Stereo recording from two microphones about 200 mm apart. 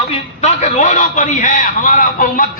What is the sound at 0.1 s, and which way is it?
A man's voice, 35° left (ahead or behind).